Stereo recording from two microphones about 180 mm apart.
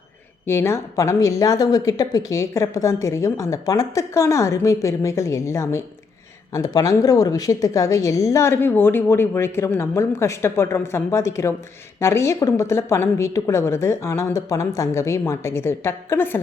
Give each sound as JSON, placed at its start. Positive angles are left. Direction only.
{"t": 0.4, "sound": "a woman's voice", "side_deg": 15}